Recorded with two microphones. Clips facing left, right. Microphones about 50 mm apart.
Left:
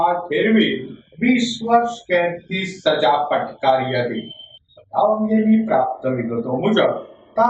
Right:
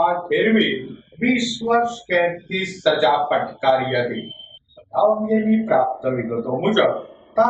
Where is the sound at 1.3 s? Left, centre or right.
Centre.